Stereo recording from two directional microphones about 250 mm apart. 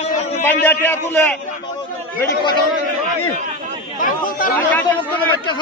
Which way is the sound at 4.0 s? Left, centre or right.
Left.